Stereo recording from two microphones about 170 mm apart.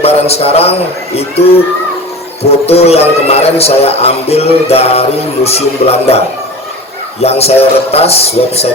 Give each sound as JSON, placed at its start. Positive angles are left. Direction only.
{"t": 0.0, "sound": "a man's voice", "side_deg": 35}
{"t": 2.4, "sound": "a man's voice", "side_deg": 35}
{"t": 7.2, "sound": "a man's voice", "side_deg": 35}